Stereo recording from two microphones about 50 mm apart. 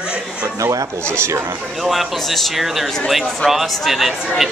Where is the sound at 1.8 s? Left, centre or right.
Centre.